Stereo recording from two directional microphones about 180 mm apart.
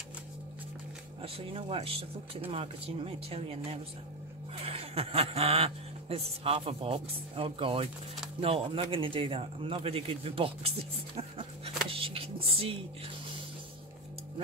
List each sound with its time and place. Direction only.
1.2 s speech: 30° right (ahead or behind)